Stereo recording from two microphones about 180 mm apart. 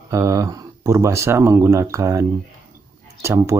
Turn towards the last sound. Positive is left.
turn(degrees=-15)  # may be behind; listen again after turning